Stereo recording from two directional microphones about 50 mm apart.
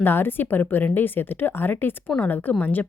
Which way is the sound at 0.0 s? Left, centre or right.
Left.